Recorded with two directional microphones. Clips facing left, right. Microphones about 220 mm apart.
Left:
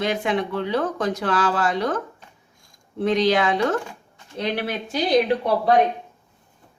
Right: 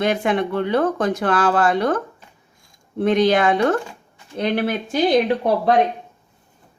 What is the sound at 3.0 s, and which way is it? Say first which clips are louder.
Speech: right 3 dB; 55° right (ahead or behind).